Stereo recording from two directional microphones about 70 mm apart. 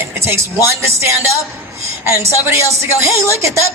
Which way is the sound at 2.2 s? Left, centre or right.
Right.